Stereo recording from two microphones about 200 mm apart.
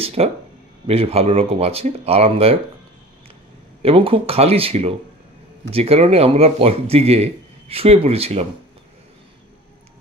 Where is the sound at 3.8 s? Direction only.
30° right (ahead or behind).